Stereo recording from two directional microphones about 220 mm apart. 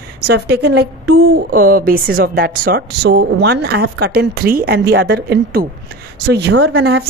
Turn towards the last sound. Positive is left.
turn(degrees=-50)  # may be behind; listen again after turning